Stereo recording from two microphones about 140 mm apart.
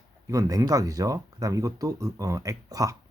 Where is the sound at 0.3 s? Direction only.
25° right (ahead or behind).